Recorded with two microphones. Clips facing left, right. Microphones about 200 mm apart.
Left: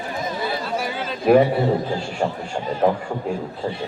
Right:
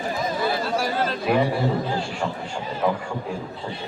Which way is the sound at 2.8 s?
50° left (ahead or behind).